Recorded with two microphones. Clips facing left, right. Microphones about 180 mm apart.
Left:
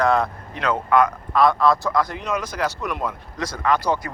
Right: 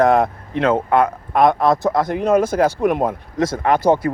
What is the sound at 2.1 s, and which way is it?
Speech, 50° right (ahead or behind).